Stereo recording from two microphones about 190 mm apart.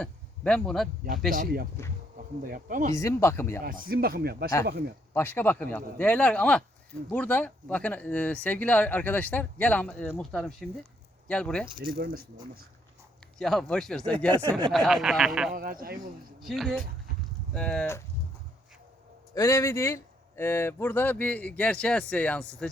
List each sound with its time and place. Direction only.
0.0 s speech: 5° left (ahead or behind)
1.8 s speech: 15° left (ahead or behind)
2.1 s speech: 45° right (ahead or behind)
2.9 s speech: 15° left (ahead or behind)
3.6 s speech: 50° right (ahead or behind)
5.1 s speech: 10° left (ahead or behind)
11.9 s speech: 50° right (ahead or behind)
13.4 s speech: centre (ahead or behind)
15.5 s speech: 50° right (ahead or behind)
16.4 s speech: centre (ahead or behind)
19.3 s speech: 15° left (ahead or behind)